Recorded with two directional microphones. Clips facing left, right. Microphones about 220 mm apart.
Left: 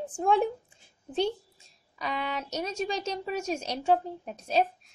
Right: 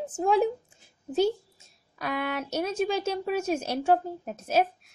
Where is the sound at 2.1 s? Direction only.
55° right (ahead or behind).